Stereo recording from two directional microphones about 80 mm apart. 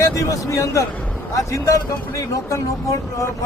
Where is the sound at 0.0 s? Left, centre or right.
Left.